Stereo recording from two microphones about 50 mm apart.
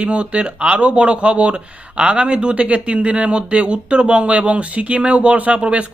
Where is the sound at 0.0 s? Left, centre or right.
Right.